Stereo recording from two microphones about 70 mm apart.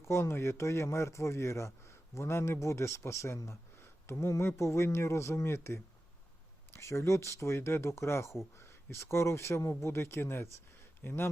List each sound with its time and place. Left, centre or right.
0.0 s speech: left